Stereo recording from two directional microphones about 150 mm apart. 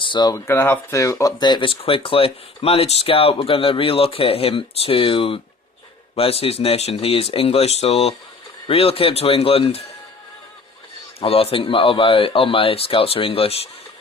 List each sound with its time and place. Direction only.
0.0 s speech: 30° left (ahead or behind)
11.2 s speech: 40° left (ahead or behind)